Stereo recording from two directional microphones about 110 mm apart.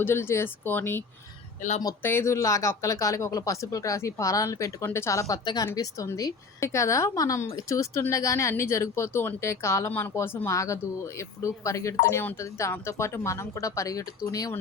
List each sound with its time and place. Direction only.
0.0 s a woman's voice: 20° left (ahead or behind)